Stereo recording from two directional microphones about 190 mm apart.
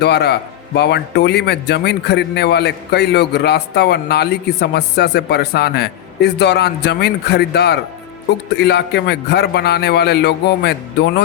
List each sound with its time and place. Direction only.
0.0 s a man's voice: 60° left (ahead or behind)